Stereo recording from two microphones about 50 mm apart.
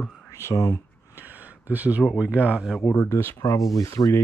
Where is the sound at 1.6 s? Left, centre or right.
Right.